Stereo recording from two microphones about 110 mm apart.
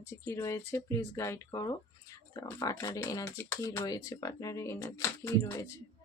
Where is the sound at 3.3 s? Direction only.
25° left (ahead or behind).